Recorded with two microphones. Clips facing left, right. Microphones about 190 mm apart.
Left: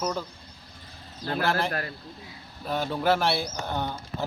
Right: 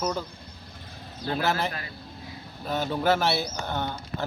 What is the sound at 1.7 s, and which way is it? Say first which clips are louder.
Speech: left 5 dB; 55° left (ahead or behind).